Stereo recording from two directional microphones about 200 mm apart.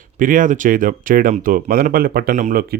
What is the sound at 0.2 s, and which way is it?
Speech, 40° right (ahead or behind).